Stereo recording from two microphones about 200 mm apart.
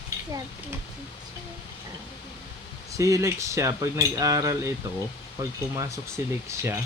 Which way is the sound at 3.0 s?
15° right (ahead or behind).